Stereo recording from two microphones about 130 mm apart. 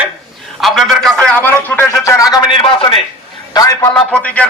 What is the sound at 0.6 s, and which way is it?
Speech, centre (ahead or behind).